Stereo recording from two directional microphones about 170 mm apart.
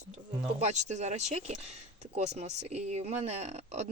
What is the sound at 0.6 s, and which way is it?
Speech, 45° right (ahead or behind).